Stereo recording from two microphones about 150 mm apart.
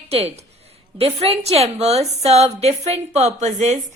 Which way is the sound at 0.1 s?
45° right (ahead or behind).